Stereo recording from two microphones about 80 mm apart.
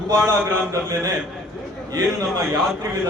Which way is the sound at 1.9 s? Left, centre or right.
Right.